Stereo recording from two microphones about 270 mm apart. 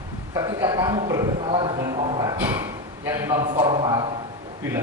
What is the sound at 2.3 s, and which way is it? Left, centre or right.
A man's voice, centre.